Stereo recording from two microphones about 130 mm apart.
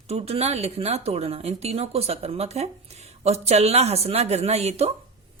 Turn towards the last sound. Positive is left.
turn(degrees=-55)  # may be behind; listen again after turning